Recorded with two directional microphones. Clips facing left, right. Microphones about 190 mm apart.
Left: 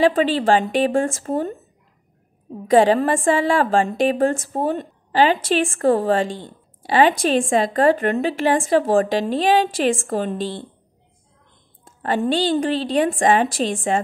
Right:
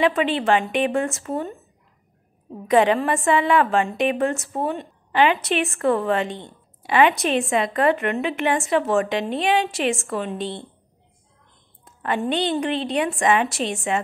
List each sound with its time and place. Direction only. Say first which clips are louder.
0.0 s a woman's voice: left 3 dB; 35° left (ahead or behind)
2.7 s a woman's voice: left 3 dB; 35° left (ahead or behind)
4.3 s a woman's voice: left 3 dB; 45° left (ahead or behind)
11.8 s a woman's voice: left 3 dB; 35° left (ahead or behind)